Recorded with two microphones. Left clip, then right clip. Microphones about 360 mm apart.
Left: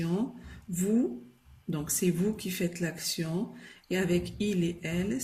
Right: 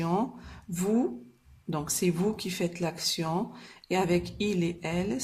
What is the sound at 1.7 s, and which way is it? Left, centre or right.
Speech, centre.